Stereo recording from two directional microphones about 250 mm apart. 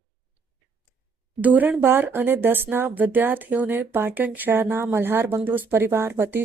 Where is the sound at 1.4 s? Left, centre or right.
Centre.